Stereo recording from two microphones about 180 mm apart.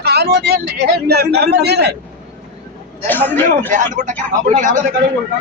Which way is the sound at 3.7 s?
45° right (ahead or behind).